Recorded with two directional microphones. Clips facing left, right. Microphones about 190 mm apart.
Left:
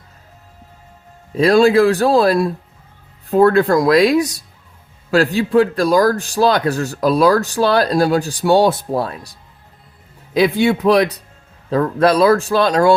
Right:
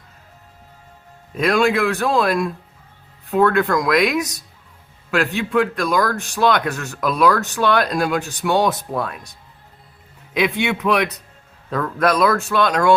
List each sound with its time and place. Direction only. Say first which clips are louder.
1.4 s a man's voice: left 6 dB; 30° left (ahead or behind)